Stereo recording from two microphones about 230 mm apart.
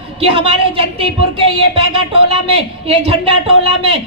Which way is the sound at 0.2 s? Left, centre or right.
Right.